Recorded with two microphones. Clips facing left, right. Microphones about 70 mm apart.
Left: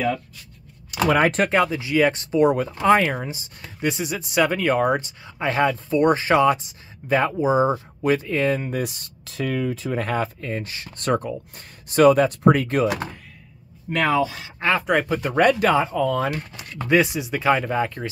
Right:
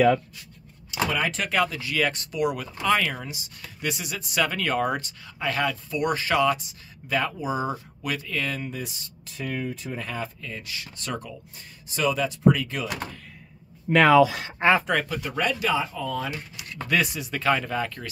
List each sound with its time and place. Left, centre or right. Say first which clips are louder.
0.9 s speech: left 8 dB; left
1.5 s speech: left 5 dB; left
8.7 s speech: left 9 dB; left
9.3 s speech: left 6 dB; left
10.5 s speech: left 7 dB; left
14.0 s speech: right 4 dB; right
14.6 s speech: right 2 dB; right
15.0 s speech: left 9 dB; left
16.8 s speech: left 6 dB; left